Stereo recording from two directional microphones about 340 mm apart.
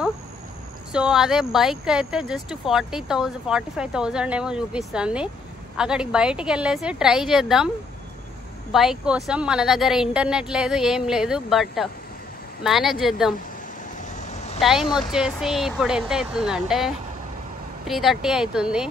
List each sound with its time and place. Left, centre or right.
0.9 s speech: centre
8.7 s speech: centre
14.3 s vehicle: centre
14.6 s speech: centre